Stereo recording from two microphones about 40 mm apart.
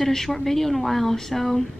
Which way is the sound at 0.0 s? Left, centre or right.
Centre.